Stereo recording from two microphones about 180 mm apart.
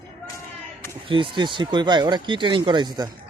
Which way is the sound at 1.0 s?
30° right (ahead or behind).